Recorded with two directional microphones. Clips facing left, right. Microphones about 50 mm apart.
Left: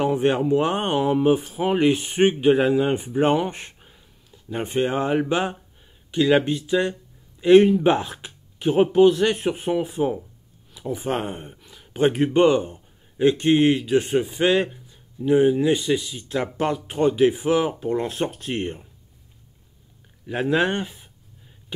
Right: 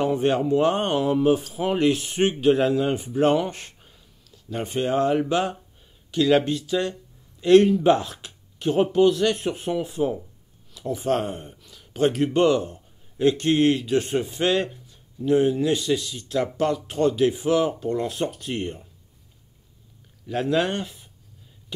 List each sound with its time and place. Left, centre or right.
0.0 s speech: centre
20.2 s speech: centre